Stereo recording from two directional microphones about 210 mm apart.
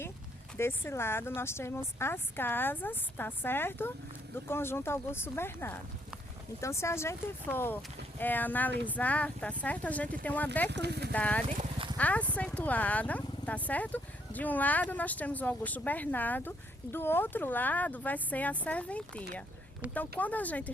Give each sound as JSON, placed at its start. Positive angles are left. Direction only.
{"t": 0.5, "sound": "speech", "side_deg": 10}
{"t": 10.7, "sound": "speech", "side_deg": -55}
{"t": 11.1, "sound": "speech", "side_deg": 5}
{"t": 11.4, "sound": "horse", "side_deg": -30}
{"t": 11.9, "sound": "speech", "side_deg": 5}